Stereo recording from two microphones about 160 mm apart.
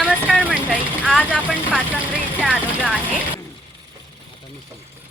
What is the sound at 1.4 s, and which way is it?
Vehicle, 10° right (ahead or behind).